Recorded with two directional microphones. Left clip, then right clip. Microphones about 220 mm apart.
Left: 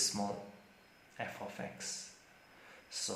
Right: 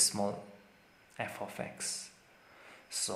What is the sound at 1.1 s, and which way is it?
Speech, 45° right (ahead or behind).